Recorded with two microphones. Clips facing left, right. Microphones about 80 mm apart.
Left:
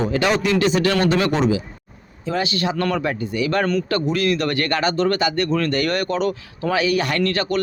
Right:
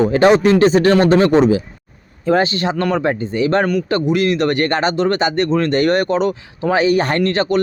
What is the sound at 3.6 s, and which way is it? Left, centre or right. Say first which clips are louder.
A man's voice: right 3 dB; centre.